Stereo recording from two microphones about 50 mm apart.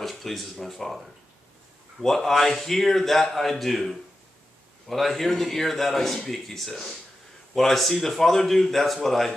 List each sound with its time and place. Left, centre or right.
0.0 s a man's voice: centre